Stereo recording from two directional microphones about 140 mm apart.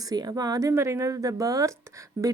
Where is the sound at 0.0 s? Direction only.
25° right (ahead or behind).